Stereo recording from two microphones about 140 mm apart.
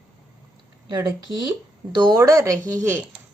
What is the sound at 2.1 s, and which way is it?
Speech, 20° right (ahead or behind).